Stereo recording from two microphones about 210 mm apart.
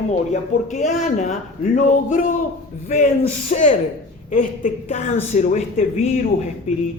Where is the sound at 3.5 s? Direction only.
35° left (ahead or behind).